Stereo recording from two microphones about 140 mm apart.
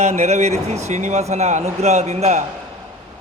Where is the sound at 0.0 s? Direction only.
55° right (ahead or behind).